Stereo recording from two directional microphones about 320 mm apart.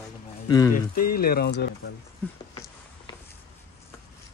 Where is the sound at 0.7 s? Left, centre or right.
Left.